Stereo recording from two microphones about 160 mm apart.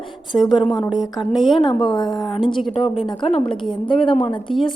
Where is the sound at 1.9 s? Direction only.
25° left (ahead or behind).